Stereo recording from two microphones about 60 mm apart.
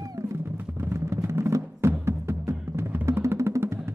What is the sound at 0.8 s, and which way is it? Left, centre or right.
Music, right.